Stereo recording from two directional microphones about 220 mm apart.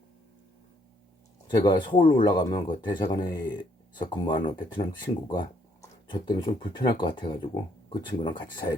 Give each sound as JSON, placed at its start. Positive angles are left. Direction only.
{"t": 1.5, "sound": "speech", "side_deg": 20}